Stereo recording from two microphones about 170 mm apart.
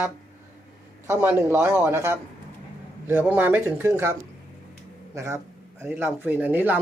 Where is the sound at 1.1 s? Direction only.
15° right (ahead or behind).